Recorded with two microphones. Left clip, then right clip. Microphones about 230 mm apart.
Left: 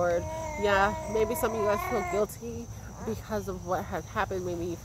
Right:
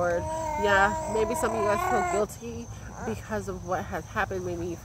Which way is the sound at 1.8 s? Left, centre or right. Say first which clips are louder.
Right 4 dB; right.